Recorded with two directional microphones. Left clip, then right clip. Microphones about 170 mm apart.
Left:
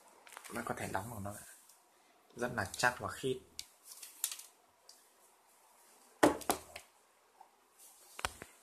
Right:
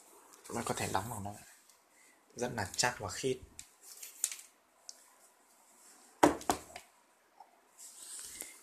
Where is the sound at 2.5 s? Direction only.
10° right (ahead or behind).